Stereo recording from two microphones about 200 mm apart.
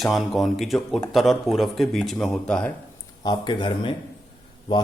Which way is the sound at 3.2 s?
20° left (ahead or behind).